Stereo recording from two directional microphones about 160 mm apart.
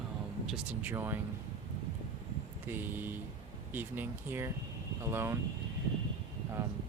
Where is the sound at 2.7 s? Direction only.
15° right (ahead or behind).